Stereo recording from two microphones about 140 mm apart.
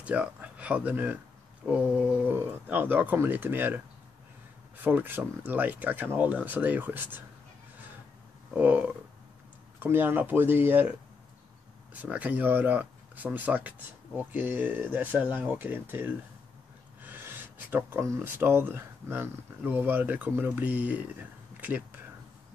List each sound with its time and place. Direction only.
0.0 s speech: 10° right (ahead or behind)
4.8 s speech: 15° right (ahead or behind)
8.5 s speech: 10° right (ahead or behind)